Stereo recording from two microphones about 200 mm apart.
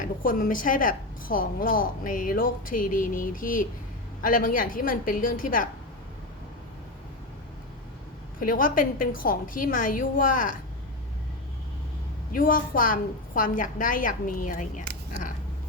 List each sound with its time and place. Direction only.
0.0 s a woman's voice: 45° left (ahead or behind)
8.4 s a woman's voice: 45° left (ahead or behind)
12.3 s a woman's voice: 45° left (ahead or behind)